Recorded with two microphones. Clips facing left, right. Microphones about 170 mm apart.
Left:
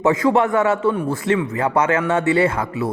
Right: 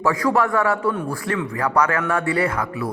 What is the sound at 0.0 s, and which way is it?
Speech, 25° left (ahead or behind).